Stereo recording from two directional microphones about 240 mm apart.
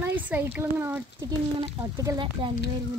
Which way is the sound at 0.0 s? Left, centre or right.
Centre.